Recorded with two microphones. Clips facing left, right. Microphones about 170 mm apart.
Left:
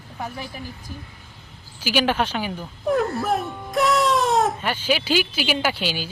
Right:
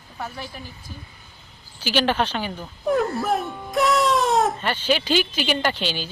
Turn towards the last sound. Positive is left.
turn(degrees=10)  # may be behind; listen again after turning